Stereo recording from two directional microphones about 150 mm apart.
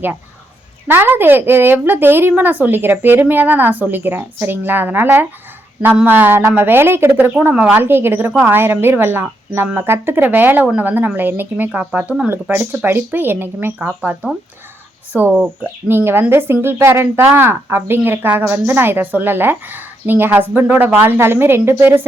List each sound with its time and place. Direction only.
0.9 s speech: 15° right (ahead or behind)